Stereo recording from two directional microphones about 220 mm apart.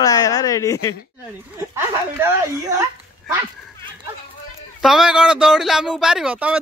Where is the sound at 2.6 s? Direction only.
15° right (ahead or behind).